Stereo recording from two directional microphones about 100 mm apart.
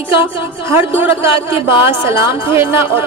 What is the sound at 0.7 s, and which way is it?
Speech, 25° right (ahead or behind).